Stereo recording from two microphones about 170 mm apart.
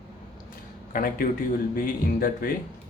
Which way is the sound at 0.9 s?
55° left (ahead or behind).